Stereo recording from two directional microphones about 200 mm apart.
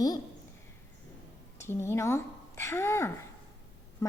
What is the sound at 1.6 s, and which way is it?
A woman's voice, 10° left (ahead or behind).